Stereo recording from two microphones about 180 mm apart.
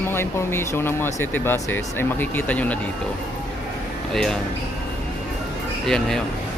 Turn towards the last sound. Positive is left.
turn(degrees=5)  # may be behind; listen again after turning